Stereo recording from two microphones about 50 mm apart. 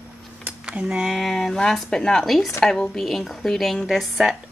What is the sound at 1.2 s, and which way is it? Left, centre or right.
A woman's voice, centre.